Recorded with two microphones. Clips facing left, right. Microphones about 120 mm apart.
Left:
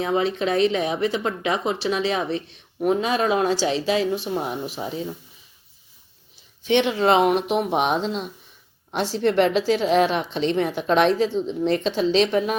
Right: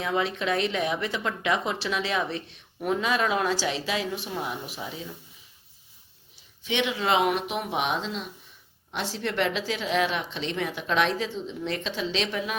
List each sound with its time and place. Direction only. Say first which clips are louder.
0.0 s speech: left 5 dB; 30° left (ahead or behind)
6.7 s a woman's voice: left 7 dB; 35° left (ahead or behind)